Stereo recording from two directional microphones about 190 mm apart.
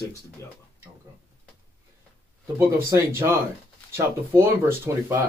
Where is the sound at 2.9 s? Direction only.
15° right (ahead or behind).